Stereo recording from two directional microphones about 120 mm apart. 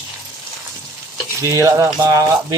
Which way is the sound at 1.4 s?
25° right (ahead or behind).